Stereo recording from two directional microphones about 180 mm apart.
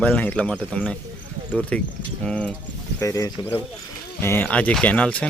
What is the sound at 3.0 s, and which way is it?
Speech, 15° left (ahead or behind).